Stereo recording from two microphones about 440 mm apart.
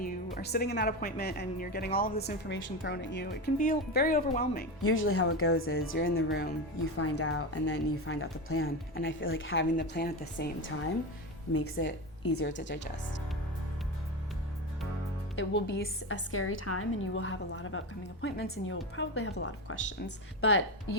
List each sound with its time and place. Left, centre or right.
0.3 s speech: left
15.4 s speech: left